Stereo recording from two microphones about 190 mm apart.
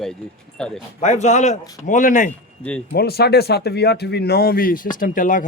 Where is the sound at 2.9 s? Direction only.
55° left (ahead or behind).